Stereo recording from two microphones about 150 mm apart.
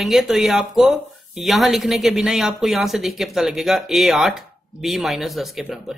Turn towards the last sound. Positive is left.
turn(degrees=0)  # may be behind; listen again after turning